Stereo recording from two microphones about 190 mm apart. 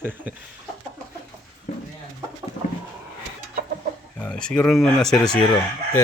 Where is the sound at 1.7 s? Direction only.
40° left (ahead or behind).